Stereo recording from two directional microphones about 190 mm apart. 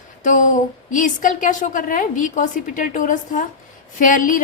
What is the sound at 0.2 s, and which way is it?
A woman's voice, 40° left (ahead or behind).